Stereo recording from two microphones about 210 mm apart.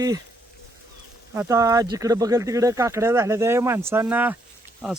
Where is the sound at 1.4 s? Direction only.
15° right (ahead or behind).